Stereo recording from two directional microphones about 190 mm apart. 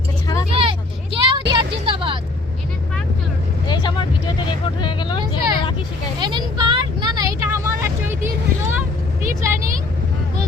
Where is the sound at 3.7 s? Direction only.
25° left (ahead or behind).